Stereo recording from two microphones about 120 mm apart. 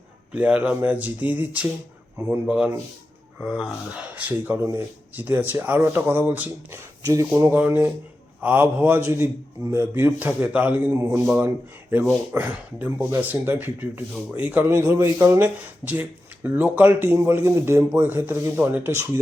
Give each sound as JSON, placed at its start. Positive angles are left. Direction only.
{"t": 0.3, "sound": "speech", "side_deg": -10}
{"t": 7.0, "sound": "speech", "side_deg": -25}